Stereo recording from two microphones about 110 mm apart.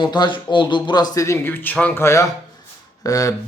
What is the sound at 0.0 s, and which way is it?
A man's voice, 45° left (ahead or behind).